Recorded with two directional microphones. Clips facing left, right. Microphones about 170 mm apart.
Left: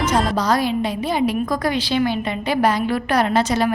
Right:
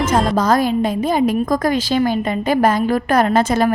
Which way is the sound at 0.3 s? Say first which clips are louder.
Right 4 dB; 50° right (ahead or behind).